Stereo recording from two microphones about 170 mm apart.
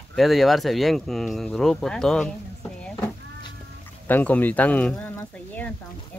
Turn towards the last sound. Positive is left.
turn(degrees=10)  # may be behind; listen again after turning